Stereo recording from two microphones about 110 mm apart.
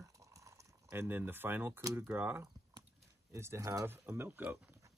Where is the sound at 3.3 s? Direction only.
25° right (ahead or behind).